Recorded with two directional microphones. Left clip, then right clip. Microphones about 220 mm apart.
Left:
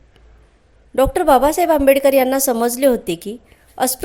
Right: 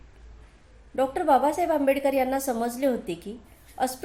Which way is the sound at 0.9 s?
45° left (ahead or behind).